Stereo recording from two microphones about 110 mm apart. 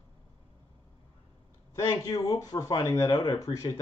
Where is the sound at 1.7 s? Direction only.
30° left (ahead or behind).